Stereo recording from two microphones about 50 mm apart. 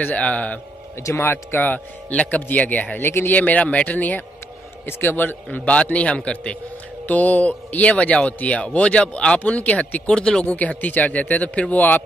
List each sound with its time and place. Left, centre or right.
0.0 s a man's voice: left
1.1 s speech: left
1.6 s a man's voice: left
3.0 s speech: left
3.3 s speech: left
4.8 s speech: left
5.7 s a man's voice: left
10.4 s speech: left